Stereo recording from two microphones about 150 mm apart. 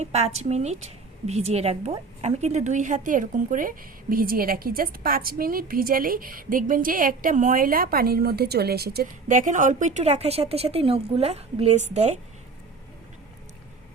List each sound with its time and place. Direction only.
0.0 s a woman's voice: 45° right (ahead or behind)